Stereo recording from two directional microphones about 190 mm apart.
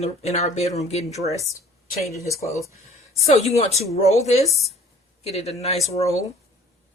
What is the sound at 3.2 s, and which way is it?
Speech, 35° left (ahead or behind).